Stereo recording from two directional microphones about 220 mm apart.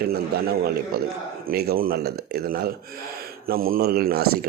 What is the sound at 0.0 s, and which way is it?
A man's voice, 45° right (ahead or behind).